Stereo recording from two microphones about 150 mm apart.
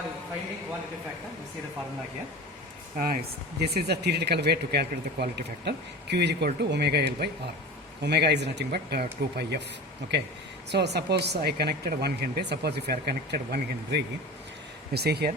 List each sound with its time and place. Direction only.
3.0 s speech: 85° right
10.7 s speech: 90° right